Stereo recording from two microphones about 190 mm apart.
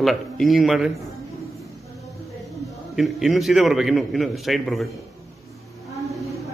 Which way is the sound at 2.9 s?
Centre (ahead or behind).